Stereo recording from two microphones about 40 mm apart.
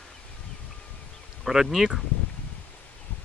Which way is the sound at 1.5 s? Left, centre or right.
Centre.